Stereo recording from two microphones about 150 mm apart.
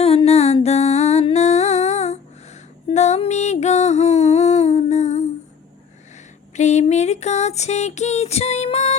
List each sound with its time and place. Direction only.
0.0 s music: 40° left (ahead or behind)
6.6 s music: 50° left (ahead or behind)